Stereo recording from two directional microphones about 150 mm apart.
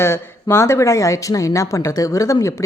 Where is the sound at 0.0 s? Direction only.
15° left (ahead or behind).